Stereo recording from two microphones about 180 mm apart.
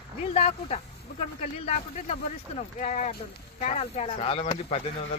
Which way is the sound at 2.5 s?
40° left (ahead or behind).